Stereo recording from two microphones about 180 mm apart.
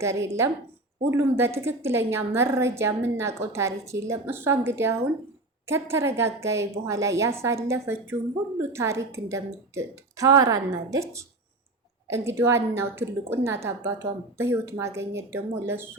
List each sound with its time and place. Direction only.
0.0 s a woman's voice: 15° right (ahead or behind)